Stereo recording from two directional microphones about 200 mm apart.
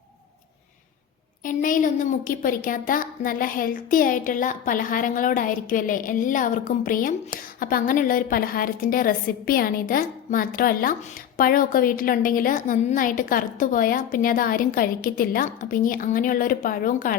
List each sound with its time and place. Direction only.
1.5 s a woman's voice: 40° left (ahead or behind)